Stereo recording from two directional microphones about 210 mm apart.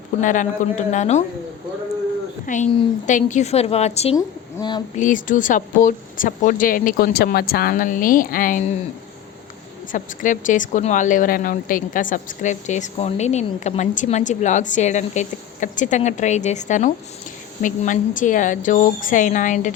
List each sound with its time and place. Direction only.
0.2 s a woman's voice: 40° left (ahead or behind)
2.5 s a woman's voice: 40° left (ahead or behind); by 4.8 s 20° left (ahead or behind)
4.9 s a woman's voice: 40° left (ahead or behind)
9.9 s a woman's voice: 40° left (ahead or behind)